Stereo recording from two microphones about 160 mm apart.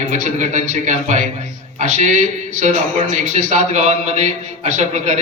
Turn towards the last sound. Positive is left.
turn(degrees=-45)  # may be behind; listen again after turning